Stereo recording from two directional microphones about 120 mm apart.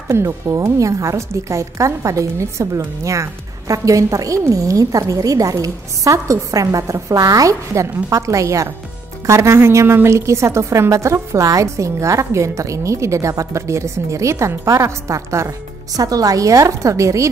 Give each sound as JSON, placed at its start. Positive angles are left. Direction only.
{"t": 0.1, "sound": "a woman's voice", "side_deg": -25}